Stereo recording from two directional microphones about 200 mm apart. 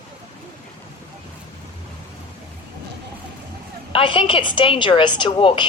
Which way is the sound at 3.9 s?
25° left (ahead or behind).